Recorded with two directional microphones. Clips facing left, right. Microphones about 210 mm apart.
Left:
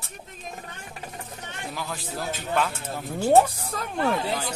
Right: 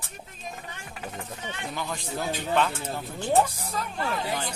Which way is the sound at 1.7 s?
Centre (ahead or behind).